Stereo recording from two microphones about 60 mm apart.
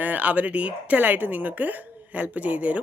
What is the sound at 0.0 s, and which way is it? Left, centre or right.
Speech, right.